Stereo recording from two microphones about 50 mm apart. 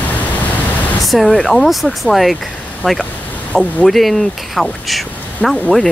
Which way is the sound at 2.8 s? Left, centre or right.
Left.